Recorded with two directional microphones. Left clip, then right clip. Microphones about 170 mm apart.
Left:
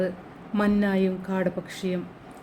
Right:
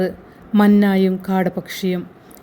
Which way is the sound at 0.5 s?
45° right (ahead or behind).